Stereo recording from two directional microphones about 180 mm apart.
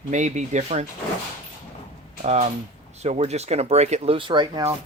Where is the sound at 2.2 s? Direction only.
40° right (ahead or behind).